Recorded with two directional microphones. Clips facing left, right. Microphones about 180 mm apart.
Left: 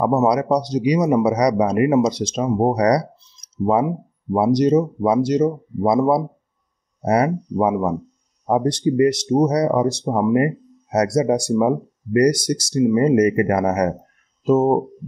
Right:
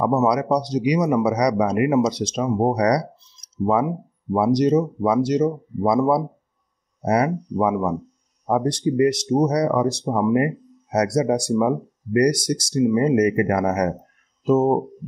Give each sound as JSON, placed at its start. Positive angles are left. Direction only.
{"t": 0.0, "sound": "speech", "side_deg": 30}
{"t": 4.3, "sound": "speech", "side_deg": 30}